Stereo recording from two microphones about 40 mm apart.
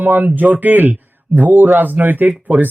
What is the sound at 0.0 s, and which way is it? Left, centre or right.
A man's voice, right.